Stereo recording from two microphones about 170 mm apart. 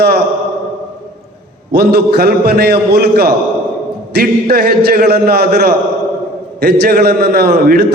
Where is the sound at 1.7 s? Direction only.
70° right (ahead or behind).